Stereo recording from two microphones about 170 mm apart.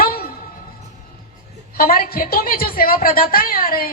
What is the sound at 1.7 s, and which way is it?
A woman's voice, 60° left (ahead or behind).